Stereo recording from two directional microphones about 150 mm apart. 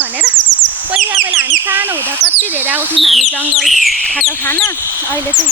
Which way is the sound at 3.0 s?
Centre (ahead or behind).